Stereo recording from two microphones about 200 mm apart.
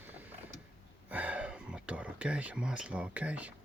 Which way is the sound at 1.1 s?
10° right (ahead or behind).